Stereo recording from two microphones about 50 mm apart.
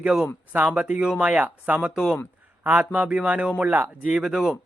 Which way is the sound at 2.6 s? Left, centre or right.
Right.